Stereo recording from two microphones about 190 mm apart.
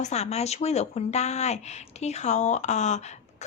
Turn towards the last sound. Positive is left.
turn(degrees=35)  # may be behind; listen again after turning